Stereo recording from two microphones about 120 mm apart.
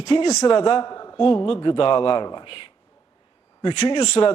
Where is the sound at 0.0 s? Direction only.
45° left (ahead or behind).